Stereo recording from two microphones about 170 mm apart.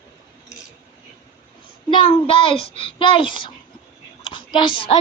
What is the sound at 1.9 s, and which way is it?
A woman's voice, 30° left (ahead or behind).